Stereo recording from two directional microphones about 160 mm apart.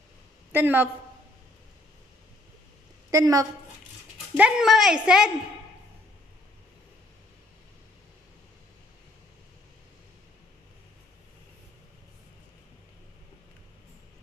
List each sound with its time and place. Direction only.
0.5 s a woman's voice: 10° right (ahead or behind)
3.1 s a woman's voice: 20° right (ahead or behind)
4.4 s a woman's voice: 5° right (ahead or behind)